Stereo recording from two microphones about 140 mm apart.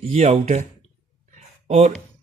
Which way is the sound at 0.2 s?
50° right (ahead or behind).